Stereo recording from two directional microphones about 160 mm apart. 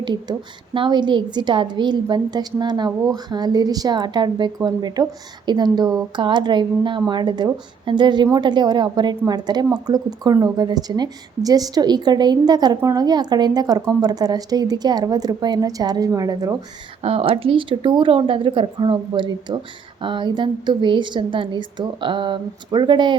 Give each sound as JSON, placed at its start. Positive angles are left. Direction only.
{"t": 0.0, "sound": "a woman's voice", "side_deg": -30}
{"t": 17.0, "sound": "a woman's voice", "side_deg": -35}